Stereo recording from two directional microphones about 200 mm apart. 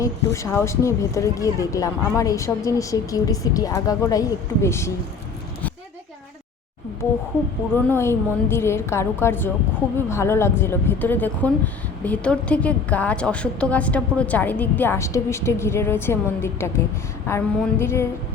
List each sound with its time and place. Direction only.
0.3 s speech: 15° left (ahead or behind)
7.7 s speech: 10° left (ahead or behind)